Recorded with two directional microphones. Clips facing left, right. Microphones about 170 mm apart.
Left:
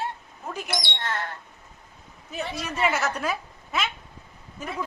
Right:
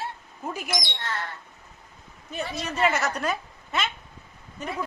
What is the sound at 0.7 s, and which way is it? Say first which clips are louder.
Speech: even; 65° left (ahead or behind).